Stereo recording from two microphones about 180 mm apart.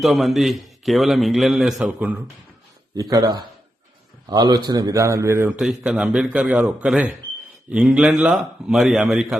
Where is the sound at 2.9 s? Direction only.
20° right (ahead or behind).